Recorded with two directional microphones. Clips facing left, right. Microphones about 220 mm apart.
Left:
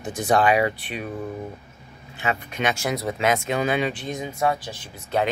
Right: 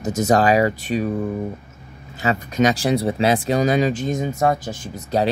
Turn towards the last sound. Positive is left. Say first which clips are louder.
# right 3 dB
turn(degrees=-40)  # may be behind; listen again after turning